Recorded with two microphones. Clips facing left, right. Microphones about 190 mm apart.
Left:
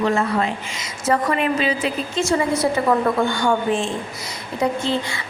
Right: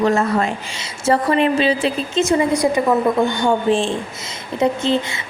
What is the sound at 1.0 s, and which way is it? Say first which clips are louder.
A woman's voice: right 4 dB; 30° right (ahead or behind).